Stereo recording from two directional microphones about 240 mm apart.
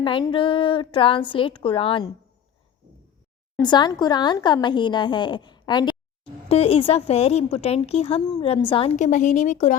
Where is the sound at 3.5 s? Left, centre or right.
Centre.